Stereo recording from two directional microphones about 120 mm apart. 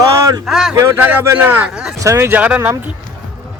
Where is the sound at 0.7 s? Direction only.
25° right (ahead or behind).